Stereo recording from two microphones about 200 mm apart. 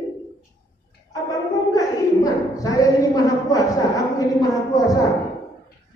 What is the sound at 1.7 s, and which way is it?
A woman's voice, 15° left (ahead or behind).